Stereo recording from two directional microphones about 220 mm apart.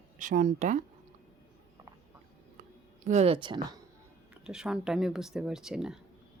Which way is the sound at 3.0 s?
30° right (ahead or behind).